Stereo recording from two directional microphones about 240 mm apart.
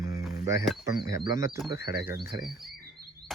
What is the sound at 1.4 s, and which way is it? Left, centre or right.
Speech, centre.